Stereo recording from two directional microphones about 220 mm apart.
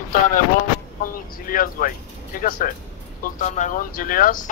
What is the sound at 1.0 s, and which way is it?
Speech, 40° left (ahead or behind).